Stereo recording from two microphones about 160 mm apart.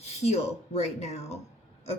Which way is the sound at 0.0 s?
40° left (ahead or behind).